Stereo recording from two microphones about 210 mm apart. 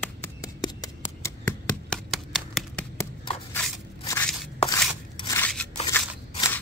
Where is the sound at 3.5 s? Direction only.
10° left (ahead or behind).